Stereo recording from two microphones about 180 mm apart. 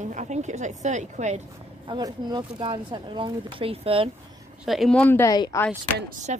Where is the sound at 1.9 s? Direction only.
25° right (ahead or behind).